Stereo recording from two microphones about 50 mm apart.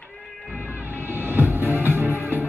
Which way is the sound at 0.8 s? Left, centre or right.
Right.